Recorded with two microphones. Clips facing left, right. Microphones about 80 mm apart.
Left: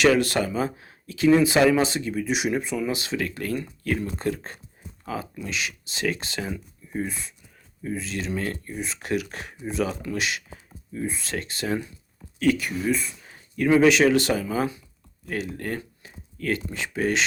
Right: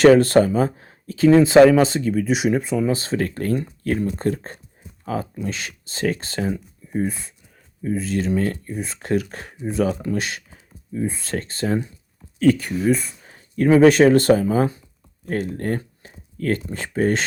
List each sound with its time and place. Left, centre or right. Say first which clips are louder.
0.0 s speech: right 8 dB; right
2.0 s speech: right 6 dB; right
2.3 s speech: right 4 dB; right
7.9 s speech: right 7 dB; right